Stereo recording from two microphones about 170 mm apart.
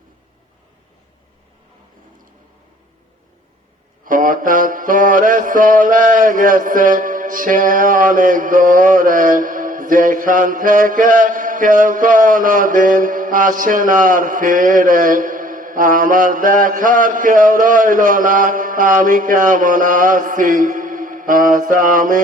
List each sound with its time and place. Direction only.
4.0 s mantra: 55° right (ahead or behind)